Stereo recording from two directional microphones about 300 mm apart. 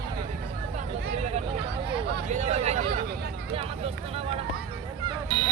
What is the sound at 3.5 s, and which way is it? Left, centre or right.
Vehicle, centre.